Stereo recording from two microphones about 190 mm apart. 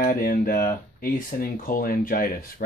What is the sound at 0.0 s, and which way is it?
Speech, 50° left (ahead or behind).